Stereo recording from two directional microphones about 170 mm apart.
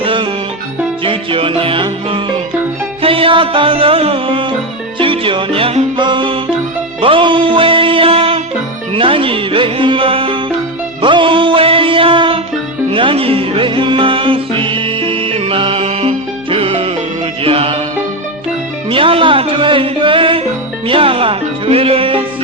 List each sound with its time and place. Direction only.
0.0 s music: 30° right (ahead or behind)
18.9 s music: 30° right (ahead or behind)